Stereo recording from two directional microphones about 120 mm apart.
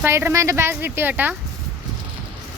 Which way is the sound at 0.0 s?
20° right (ahead or behind).